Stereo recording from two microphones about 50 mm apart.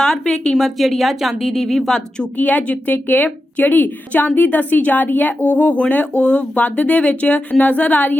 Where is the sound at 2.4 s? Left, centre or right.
Left.